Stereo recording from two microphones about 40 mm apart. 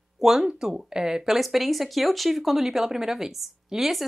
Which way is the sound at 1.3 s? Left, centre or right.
Centre.